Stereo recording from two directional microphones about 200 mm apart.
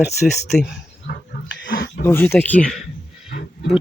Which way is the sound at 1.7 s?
50° left (ahead or behind).